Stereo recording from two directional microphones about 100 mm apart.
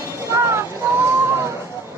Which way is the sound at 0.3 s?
25° right (ahead or behind).